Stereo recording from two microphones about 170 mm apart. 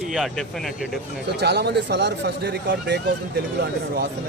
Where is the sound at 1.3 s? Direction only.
75° right (ahead or behind).